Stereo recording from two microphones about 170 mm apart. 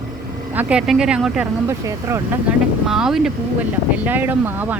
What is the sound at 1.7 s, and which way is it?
Speech, 15° right (ahead or behind).